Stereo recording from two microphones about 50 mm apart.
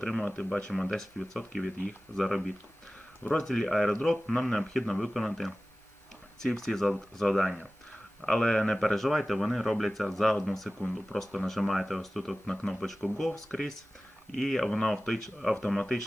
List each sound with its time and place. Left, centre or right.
0.0 s speech: centre
0.3 s speech: left
0.9 s speech: centre